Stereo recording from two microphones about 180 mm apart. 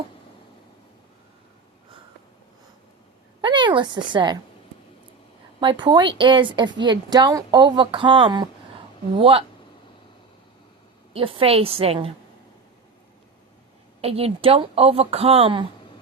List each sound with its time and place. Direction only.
3.4 s speech: 25° right (ahead or behind)
5.5 s a woman's voice: 25° right (ahead or behind)
11.1 s speech: 30° right (ahead or behind)
14.0 s speech: 35° right (ahead or behind)